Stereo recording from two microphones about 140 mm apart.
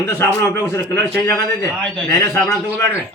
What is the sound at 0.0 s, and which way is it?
A man's voice, 15° left (ahead or behind).